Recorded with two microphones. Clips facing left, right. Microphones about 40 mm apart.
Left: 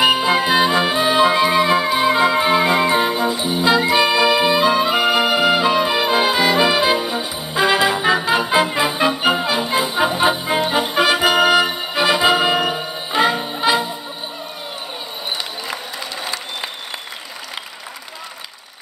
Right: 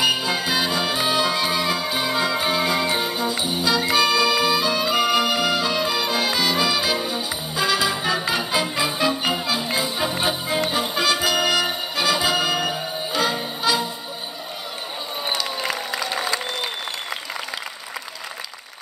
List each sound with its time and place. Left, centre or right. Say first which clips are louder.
0.0 s music: left 6 dB; left
1.9 s music: left 7 dB; centre
3.1 s music: left 5 dB; centre
3.6 s music: left 5 dB; left